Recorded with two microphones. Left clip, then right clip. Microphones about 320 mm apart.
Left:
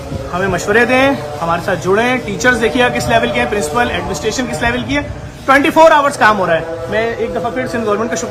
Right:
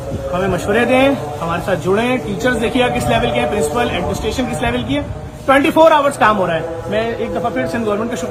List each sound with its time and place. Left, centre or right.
0.3 s speech: centre